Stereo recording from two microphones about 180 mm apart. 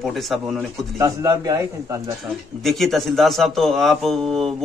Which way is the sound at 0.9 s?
20° right (ahead or behind).